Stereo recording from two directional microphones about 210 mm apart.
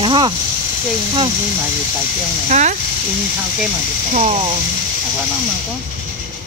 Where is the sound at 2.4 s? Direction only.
35° right (ahead or behind).